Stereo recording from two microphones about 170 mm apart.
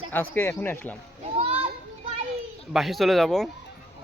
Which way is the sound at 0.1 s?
15° left (ahead or behind).